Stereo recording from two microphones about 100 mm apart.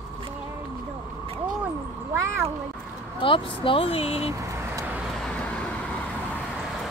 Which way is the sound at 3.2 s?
60° left (ahead or behind).